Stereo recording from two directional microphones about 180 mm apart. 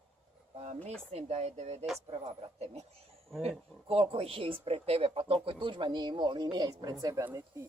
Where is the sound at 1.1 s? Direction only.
35° right (ahead or behind); by 7.6 s 15° right (ahead or behind).